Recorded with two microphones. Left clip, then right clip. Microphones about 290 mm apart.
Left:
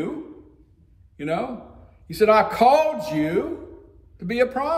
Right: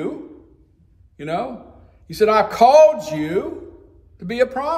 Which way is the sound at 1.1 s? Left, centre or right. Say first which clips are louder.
Right 2 dB; centre.